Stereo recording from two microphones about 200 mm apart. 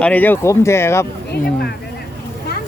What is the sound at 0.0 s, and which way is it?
Speech, 10° left (ahead or behind).